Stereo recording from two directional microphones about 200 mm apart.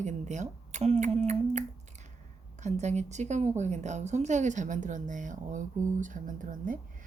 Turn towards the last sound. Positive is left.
turn(degrees=-40)  # may be behind; listen again after turning